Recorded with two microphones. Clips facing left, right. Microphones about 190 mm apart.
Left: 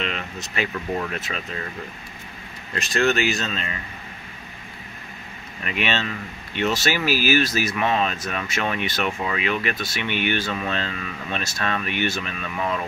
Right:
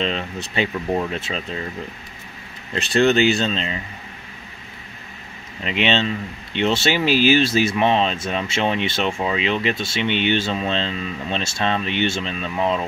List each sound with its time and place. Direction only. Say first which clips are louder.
0.0 s speech: right 5 dB; 30° right (ahead or behind)
2.7 s speech: right 5 dB; 30° right (ahead or behind)
5.6 s speech: right 5 dB; 25° right (ahead or behind)